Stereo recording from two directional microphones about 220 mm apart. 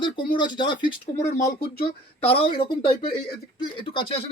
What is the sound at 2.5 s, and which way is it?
Speech, 20° left (ahead or behind).